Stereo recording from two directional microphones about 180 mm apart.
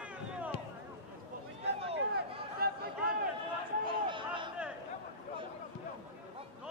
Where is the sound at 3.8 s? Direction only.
25° right (ahead or behind).